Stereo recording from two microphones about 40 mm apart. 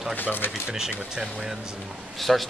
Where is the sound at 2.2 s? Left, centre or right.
Centre.